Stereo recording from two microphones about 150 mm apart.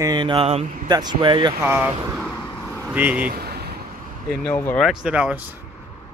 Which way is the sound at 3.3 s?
90° right.